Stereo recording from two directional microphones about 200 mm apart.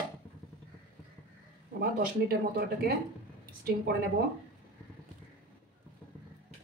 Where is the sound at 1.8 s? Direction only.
45° right (ahead or behind).